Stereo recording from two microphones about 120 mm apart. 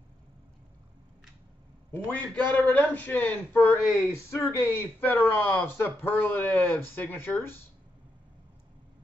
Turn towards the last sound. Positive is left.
turn(degrees=20)  # may be behind; listen again after turning